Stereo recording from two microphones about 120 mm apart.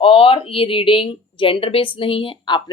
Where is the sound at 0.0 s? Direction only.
50° left (ahead or behind).